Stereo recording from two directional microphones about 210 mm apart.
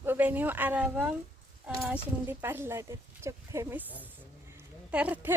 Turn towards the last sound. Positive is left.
turn(degrees=-5)  # may be behind; listen again after turning